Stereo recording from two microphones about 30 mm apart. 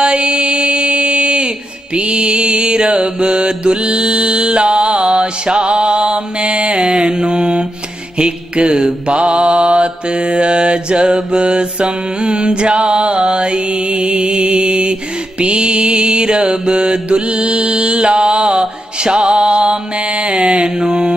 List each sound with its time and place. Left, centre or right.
0.0 s mantra: right